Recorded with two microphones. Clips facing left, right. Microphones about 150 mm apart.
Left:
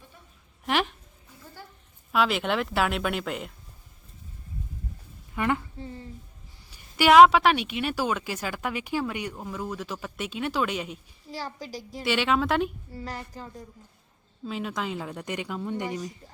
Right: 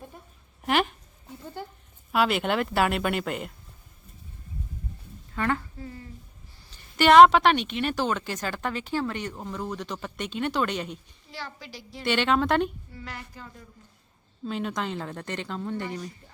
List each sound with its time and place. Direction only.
0.6 s a sound: centre (ahead or behind)
2.1 s speech: centre (ahead or behind)
5.3 s speech: 15° left (ahead or behind)
6.7 s a woman's voice: 10° left (ahead or behind)
11.3 s a woman's voice: 40° left (ahead or behind)
12.0 s speech: 5° left (ahead or behind)
12.9 s a woman's voice: 40° left (ahead or behind)
14.4 s a woman's voice: 5° left (ahead or behind)